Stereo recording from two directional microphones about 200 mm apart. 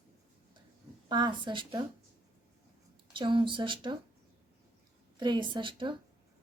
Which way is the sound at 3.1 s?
25° right (ahead or behind).